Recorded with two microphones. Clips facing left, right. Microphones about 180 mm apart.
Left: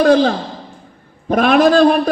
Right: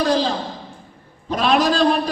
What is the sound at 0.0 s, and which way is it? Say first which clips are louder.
A man's voice: left 7 dB; 55° left (ahead or behind).